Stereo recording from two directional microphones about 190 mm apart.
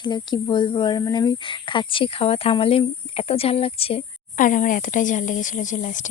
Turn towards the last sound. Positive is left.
turn(degrees=40)  # may be behind; listen again after turning